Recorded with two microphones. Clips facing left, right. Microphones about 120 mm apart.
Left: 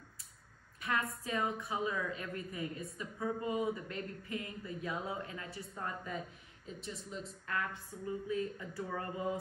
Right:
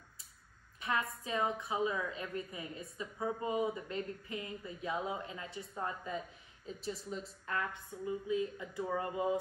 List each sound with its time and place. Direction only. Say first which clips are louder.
0.7 s a sound: right 1 dB; 25° right (ahead or behind)
1.2 s speech: right 1 dB; 25° right (ahead or behind)
6.7 s speech: right 4 dB; centre (ahead or behind)
8.0 s speech: right 2 dB; 15° right (ahead or behind)